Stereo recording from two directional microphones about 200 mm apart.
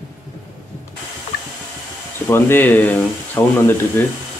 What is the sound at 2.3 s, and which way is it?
Speech, 10° left (ahead or behind).